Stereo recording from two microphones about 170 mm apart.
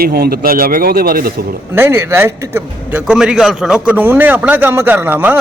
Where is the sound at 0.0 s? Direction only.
60° right (ahead or behind).